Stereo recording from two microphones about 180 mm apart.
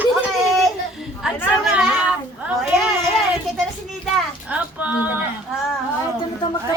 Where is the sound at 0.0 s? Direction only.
5° right (ahead or behind).